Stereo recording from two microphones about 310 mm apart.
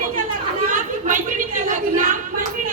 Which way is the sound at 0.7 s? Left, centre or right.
Right.